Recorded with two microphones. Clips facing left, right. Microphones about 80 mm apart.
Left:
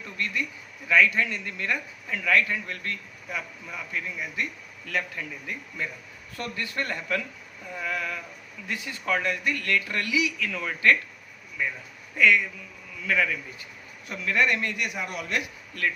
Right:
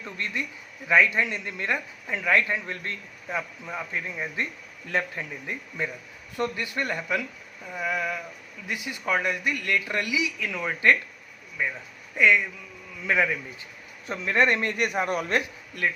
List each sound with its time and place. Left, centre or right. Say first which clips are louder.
0.0 s speech: left 1 dB; right
7.7 s a sound: right 3 dB; centre
8.6 s a man's voice: right 1 dB; centre; by 15.4 s right
15.8 s speech: right 1 dB; centre